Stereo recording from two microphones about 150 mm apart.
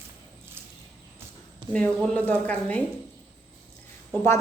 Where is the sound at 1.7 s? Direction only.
10° left (ahead or behind).